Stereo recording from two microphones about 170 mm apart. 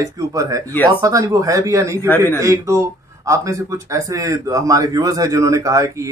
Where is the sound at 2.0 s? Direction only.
10° left (ahead or behind).